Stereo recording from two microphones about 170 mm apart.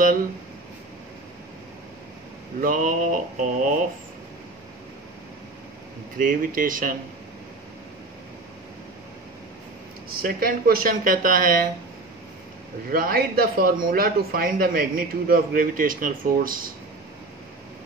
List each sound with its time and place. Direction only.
2.6 s mantra: 55° right (ahead or behind)
6.1 s mantra: 55° right (ahead or behind)
10.0 s speech: 60° right (ahead or behind)
12.9 s speech: 60° right (ahead or behind)